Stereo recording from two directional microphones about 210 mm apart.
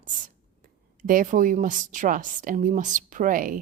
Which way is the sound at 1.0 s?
40° right (ahead or behind).